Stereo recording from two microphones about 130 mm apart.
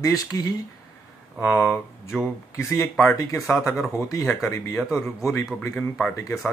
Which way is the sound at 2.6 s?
20° left (ahead or behind).